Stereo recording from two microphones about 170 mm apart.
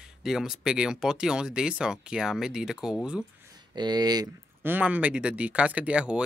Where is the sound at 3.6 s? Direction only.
25° right (ahead or behind).